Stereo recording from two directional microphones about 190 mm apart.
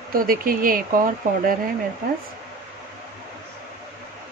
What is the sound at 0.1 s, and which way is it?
Speech, 50° right (ahead or behind).